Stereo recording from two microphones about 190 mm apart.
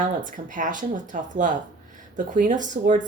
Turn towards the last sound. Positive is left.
turn(degrees=-40)  # may be behind; listen again after turning